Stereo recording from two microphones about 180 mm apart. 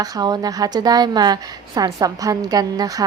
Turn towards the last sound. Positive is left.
turn(degrees=-20)  # may be behind; listen again after turning